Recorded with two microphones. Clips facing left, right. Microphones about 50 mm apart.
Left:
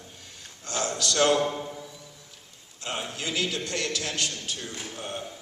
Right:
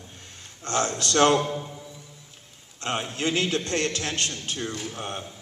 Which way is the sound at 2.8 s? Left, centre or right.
Right.